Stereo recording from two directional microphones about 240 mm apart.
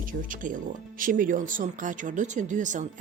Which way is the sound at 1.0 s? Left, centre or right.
Right.